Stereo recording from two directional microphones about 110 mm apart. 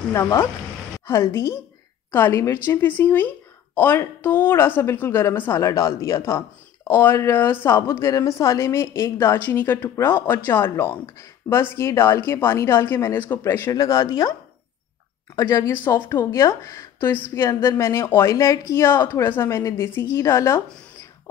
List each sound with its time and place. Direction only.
0.1 s a woman's voice: 25° left (ahead or behind)
15.3 s a woman's voice: 30° left (ahead or behind)